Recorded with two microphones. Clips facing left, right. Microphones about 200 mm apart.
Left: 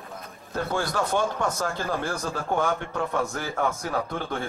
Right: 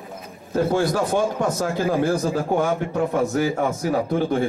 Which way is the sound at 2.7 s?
20° right (ahead or behind).